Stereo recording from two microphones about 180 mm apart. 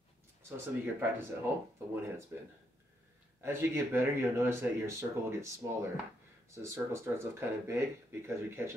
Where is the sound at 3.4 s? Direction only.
15° right (ahead or behind).